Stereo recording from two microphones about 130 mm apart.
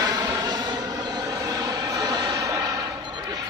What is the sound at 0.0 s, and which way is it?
Vehicle, 30° right (ahead or behind).